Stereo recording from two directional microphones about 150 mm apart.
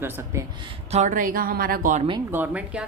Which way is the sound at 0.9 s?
55° right (ahead or behind).